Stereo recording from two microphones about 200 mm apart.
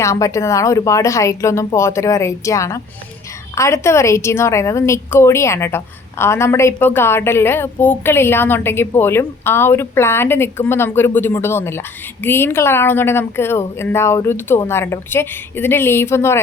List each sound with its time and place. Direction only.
0.0 s a woman's voice: 15° left (ahead or behind)